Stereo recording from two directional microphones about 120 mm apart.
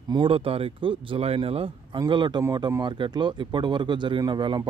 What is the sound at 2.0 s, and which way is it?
Speech, 40° right (ahead or behind).